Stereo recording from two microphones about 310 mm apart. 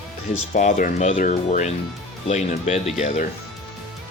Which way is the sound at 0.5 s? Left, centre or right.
Left.